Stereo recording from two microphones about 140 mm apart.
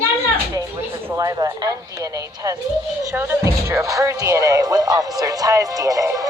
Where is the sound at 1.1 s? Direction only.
25° right (ahead or behind).